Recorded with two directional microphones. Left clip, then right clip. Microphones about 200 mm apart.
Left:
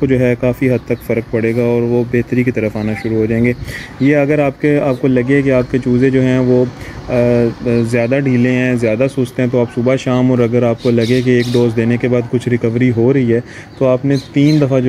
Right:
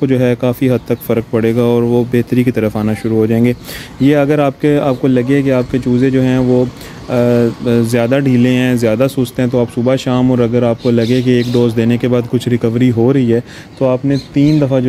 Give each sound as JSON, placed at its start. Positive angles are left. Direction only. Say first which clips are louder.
{"t": 0.0, "sound": "speech", "louder": "even", "side_deg": -15}